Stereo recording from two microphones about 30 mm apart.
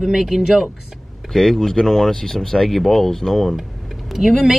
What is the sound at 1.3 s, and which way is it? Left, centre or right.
Speech, centre.